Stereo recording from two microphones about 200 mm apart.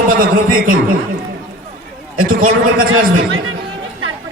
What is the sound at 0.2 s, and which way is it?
Speech, 45° right (ahead or behind).